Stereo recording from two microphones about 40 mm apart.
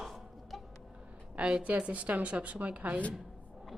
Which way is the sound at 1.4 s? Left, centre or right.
Right.